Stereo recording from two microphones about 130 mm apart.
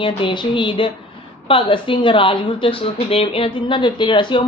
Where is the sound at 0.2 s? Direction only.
40° left (ahead or behind).